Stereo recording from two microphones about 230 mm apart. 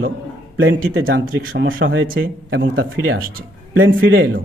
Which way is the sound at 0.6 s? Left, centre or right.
Right.